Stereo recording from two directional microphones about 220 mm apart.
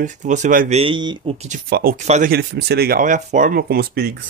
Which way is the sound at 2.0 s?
30° right (ahead or behind).